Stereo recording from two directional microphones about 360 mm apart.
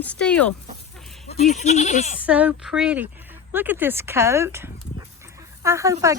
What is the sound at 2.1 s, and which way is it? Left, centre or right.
Speech, centre.